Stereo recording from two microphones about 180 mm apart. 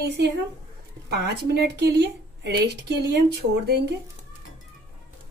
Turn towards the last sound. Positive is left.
turn(degrees=-65)  # may be behind; listen again after turning